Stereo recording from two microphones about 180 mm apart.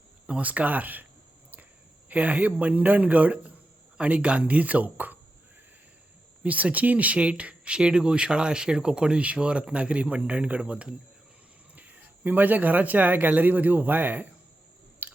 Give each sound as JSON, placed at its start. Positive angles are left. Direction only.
{"t": 0.3, "sound": "speech", "side_deg": -5}
{"t": 2.0, "sound": "speech", "side_deg": -10}
{"t": 6.4, "sound": "speech", "side_deg": -10}
{"t": 15.0, "sound": "chewing", "side_deg": -10}